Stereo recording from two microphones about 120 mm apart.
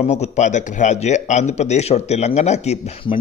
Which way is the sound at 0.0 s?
70° left (ahead or behind).